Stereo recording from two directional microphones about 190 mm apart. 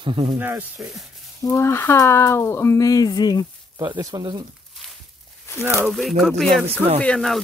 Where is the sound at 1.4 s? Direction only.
10° left (ahead or behind).